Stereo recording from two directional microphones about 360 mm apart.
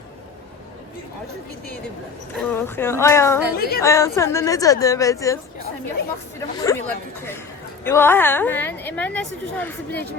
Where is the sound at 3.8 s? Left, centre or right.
Centre.